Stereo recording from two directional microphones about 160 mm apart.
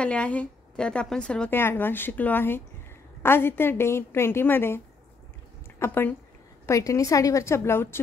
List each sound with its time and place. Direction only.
0.0 s a woman's voice: 5° left (ahead or behind)